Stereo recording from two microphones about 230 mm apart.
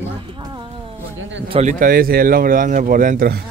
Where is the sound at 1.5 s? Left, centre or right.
Right.